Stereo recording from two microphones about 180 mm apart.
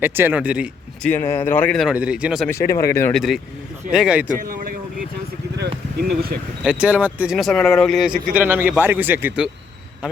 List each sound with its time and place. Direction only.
0.0 s speech: 10° right (ahead or behind)
1.0 s speech: 10° left (ahead or behind); by 2.5 s 5° right (ahead or behind)
2.7 s speech: 15° left (ahead or behind)
3.2 s speech: centre (ahead or behind)
4.4 s vehicle: 50° right (ahead or behind)
5.5 s a sound: 65° right (ahead or behind)
6.7 s speech: 5° right (ahead or behind)